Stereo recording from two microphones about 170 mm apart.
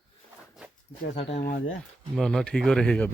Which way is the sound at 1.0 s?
40° left (ahead or behind).